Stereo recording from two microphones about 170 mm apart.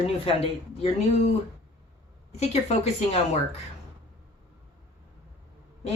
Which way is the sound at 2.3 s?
40° left (ahead or behind).